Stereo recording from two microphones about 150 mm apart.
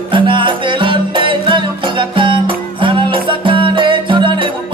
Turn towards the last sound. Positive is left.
turn(degrees=-35)  # may be behind; listen again after turning